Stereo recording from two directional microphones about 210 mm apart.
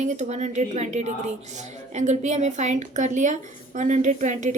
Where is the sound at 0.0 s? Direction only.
35° right (ahead or behind).